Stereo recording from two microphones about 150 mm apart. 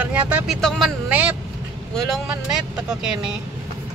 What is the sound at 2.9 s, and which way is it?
Speech, 5° right (ahead or behind).